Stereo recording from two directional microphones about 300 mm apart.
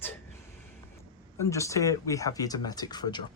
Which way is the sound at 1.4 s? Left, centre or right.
Centre.